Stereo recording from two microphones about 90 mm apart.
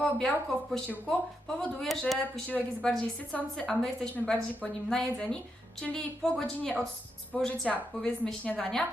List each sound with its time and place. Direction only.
0.0 s a woman's voice: 5° left (ahead or behind)